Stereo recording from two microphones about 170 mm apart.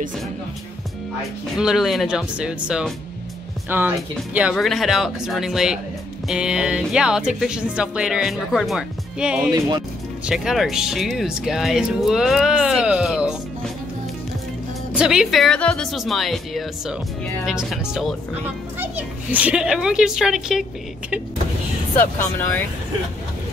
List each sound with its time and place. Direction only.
1.6 s speech: 5° right (ahead or behind)
9.5 s speech: 25° right (ahead or behind)
10.2 s speech: 5° right (ahead or behind)
15.0 s speech: 5° right (ahead or behind)
22.0 s speech: 10° left (ahead or behind)